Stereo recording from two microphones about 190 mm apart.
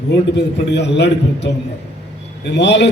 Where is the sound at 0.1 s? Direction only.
65° left (ahead or behind).